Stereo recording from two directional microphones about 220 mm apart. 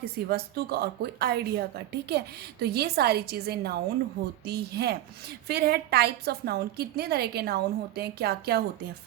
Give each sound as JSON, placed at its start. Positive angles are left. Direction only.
{"t": 0.0, "sound": "a woman's voice", "side_deg": -45}